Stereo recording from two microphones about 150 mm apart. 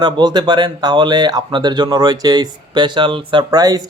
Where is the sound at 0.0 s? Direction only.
30° right (ahead or behind).